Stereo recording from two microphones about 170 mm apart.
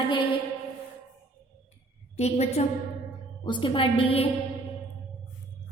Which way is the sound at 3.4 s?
30° left (ahead or behind).